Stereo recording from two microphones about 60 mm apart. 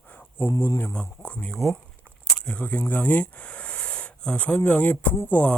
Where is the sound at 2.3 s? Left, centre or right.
Centre.